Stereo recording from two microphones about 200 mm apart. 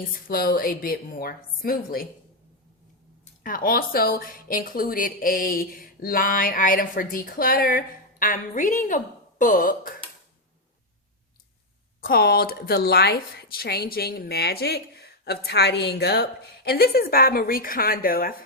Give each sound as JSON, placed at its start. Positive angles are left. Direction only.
{"t": 0.3, "sound": "a woman's voice", "side_deg": 45}
{"t": 3.4, "sound": "a woman's voice", "side_deg": 45}
{"t": 11.9, "sound": "a woman's voice", "side_deg": 50}